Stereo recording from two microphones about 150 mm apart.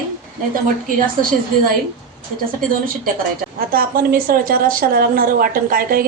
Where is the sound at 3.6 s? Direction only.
75° right (ahead or behind).